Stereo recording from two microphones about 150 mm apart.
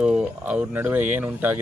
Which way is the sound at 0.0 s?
5° right (ahead or behind).